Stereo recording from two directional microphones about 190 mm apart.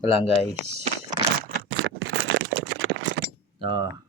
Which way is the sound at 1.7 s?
90° right.